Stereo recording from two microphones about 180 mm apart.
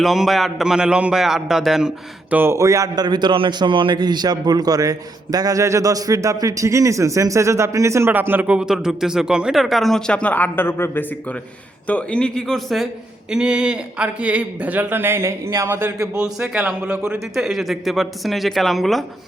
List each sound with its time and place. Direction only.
0.0 s speech: centre (ahead or behind)
2.3 s a man's voice: 15° right (ahead or behind)